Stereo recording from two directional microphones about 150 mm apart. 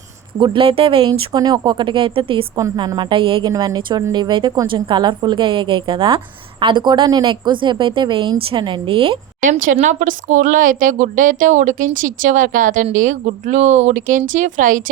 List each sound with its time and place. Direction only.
0.3 s a woman's voice: 35° right (ahead or behind)
2.6 s a woman's voice: 25° right (ahead or behind)
9.4 s a woman's voice: 60° right (ahead or behind)